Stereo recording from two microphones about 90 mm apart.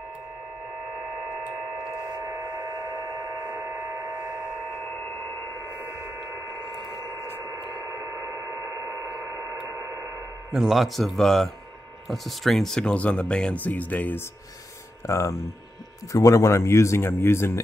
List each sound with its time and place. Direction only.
2.2 s a sound: 25° right (ahead or behind)
3.3 s hum: 20° right (ahead or behind)
5.7 s radio: 20° right (ahead or behind)
7.8 s radio: 25° right (ahead or behind)
10.5 s a man's voice: 5° right (ahead or behind); by 14.2 s 20° left (ahead or behind)
15.0 s speech: 35° left (ahead or behind)